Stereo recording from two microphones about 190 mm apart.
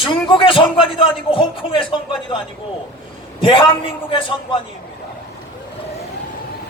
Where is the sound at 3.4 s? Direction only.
25° left (ahead or behind).